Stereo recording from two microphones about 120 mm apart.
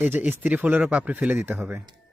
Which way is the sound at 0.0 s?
15° right (ahead or behind).